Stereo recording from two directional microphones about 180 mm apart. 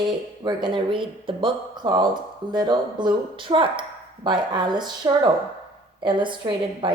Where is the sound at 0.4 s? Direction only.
25° right (ahead or behind).